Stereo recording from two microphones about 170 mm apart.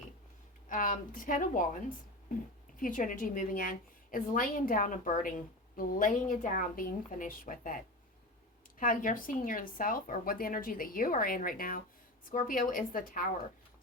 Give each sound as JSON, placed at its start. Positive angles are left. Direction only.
{"t": 0.7, "sound": "speech", "side_deg": 50}
{"t": 2.7, "sound": "speech", "side_deg": 55}
{"t": 8.8, "sound": "speech", "side_deg": 50}